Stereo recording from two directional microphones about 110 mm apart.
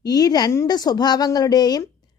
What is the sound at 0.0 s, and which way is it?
Speech, 35° left (ahead or behind).